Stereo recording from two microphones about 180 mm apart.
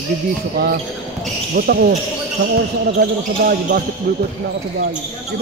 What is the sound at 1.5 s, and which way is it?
Speech, 55° right (ahead or behind).